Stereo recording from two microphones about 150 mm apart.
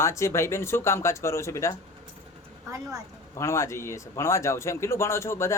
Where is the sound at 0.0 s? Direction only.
20° left (ahead or behind).